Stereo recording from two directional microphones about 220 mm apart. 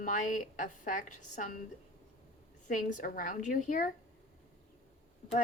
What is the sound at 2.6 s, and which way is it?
Speech, 35° left (ahead or behind).